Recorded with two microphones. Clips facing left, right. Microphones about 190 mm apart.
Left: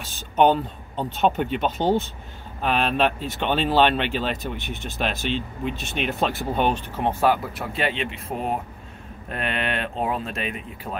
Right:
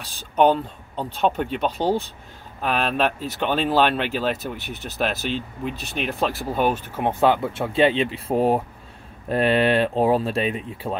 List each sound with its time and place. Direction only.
0.4 s speech: centre (ahead or behind)
4.6 s speech: 40° right (ahead or behind)
4.8 s speech: centre (ahead or behind); by 11.0 s 30° right (ahead or behind)